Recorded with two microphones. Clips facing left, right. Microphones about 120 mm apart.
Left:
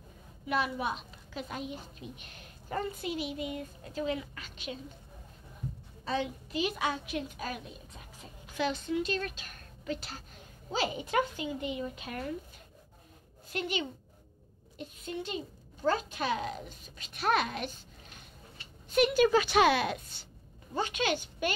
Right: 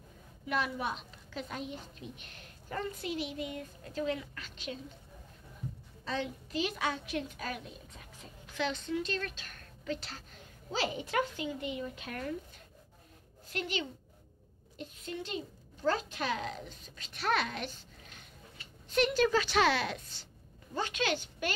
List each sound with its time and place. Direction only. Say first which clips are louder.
0.5 s a woman's voice: left 2 dB; 10° left (ahead or behind)
6.0 s a woman's voice: left 3 dB; 10° left (ahead or behind)
13.5 s a woman's voice: left 2 dB; 15° left (ahead or behind)
18.9 s a woman's voice: left 3 dB; 10° left (ahead or behind)